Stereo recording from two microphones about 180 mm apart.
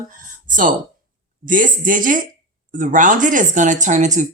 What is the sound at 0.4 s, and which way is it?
A woman's voice, 45° right (ahead or behind).